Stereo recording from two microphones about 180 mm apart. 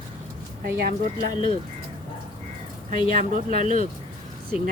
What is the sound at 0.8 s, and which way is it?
Speech, 55° right (ahead or behind).